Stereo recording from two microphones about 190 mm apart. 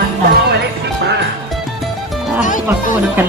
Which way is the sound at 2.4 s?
40° left (ahead or behind).